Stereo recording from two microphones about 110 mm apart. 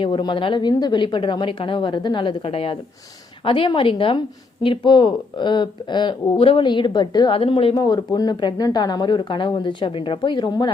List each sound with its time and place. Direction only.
0.0 s speech: 45° left (ahead or behind)
7.3 s speech: 55° left (ahead or behind)
7.7 s speech: 40° left (ahead or behind)